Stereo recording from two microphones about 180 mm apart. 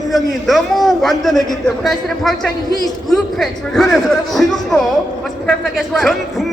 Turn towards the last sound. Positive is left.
turn(degrees=0)  # may be behind; listen again after turning